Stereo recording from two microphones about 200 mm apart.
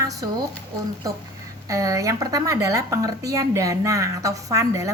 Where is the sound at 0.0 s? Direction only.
15° right (ahead or behind).